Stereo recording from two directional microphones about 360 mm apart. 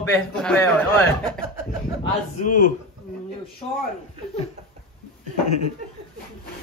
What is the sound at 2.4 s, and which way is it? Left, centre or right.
Speech, left.